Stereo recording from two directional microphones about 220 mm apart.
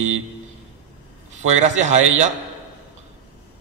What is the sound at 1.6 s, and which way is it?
Speech, 30° right (ahead or behind).